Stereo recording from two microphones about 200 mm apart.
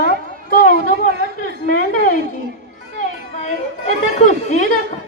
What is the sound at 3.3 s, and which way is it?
Speech, 35° left (ahead or behind).